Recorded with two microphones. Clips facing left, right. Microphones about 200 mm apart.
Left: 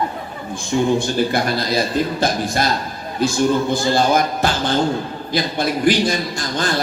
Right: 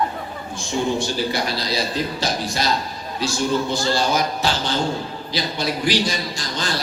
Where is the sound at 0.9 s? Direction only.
55° left (ahead or behind).